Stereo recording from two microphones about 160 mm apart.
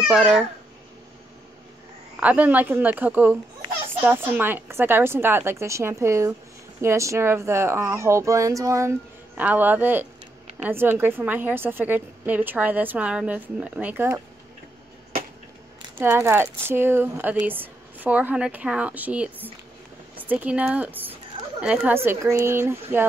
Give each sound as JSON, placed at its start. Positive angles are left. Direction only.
{"t": 0.1, "sound": "a child's voice", "side_deg": -5}
{"t": 2.1, "sound": "a woman's voice", "side_deg": -10}
{"t": 16.0, "sound": "a woman's voice", "side_deg": -15}